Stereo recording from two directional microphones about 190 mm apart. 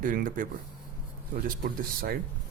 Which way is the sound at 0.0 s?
45° right (ahead or behind).